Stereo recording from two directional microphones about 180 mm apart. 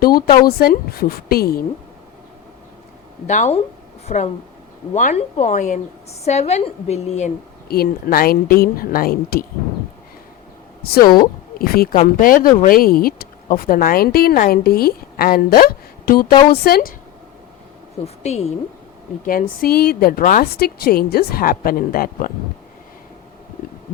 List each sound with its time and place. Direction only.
0.0 s a woman's voice: 55° left (ahead or behind)
3.2 s a woman's voice: 40° left (ahead or behind)
7.7 s a woman's voice: 55° left (ahead or behind)
11.0 s a woman's voice: 25° left (ahead or behind)
11.6 s a woman's voice: 55° left (ahead or behind)
18.0 s a woman's voice: 35° left (ahead or behind)
19.2 s a woman's voice: 50° left (ahead or behind)